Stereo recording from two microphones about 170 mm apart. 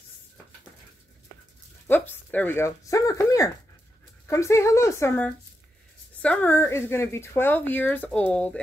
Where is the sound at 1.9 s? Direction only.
10° left (ahead or behind).